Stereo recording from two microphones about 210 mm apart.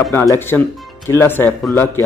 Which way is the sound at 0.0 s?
10° left (ahead or behind).